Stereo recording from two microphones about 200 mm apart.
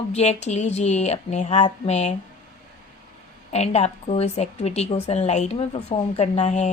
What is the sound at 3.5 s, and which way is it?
A woman's voice, 35° left (ahead or behind).